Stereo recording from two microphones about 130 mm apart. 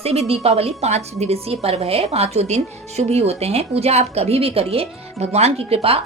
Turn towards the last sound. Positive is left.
turn(degrees=-50)  # may be behind; listen again after turning